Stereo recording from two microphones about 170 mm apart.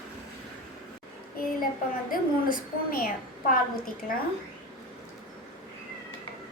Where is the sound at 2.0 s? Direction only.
55° left (ahead or behind).